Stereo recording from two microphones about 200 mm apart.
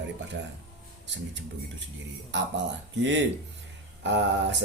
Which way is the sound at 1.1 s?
65° right (ahead or behind).